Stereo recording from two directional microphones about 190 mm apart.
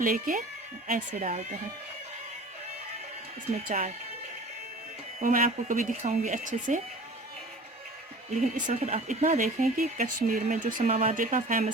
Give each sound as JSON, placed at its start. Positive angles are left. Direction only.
{"t": 0.0, "sound": "speech", "side_deg": -45}
{"t": 3.5, "sound": "speech", "side_deg": -45}
{"t": 5.2, "sound": "speech", "side_deg": -45}
{"t": 8.3, "sound": "speech", "side_deg": -40}